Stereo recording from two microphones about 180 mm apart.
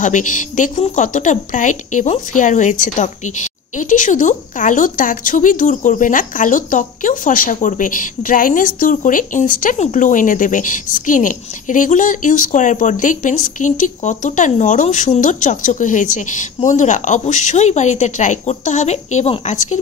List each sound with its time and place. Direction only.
0.0 s a woman's voice: 45° left (ahead or behind)